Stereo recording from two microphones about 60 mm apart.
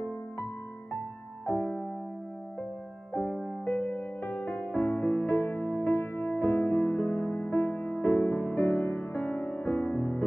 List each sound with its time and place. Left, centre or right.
1.4 s music: left
3.2 s music: left